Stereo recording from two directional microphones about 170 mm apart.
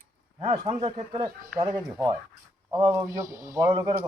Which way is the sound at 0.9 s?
40° right (ahead or behind).